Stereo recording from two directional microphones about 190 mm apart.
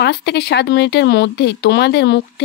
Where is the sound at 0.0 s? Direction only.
60° left (ahead or behind).